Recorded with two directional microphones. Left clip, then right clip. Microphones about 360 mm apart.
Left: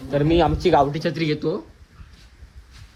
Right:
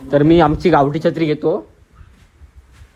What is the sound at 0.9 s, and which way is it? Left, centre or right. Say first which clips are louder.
Speech: right 7 dB; centre.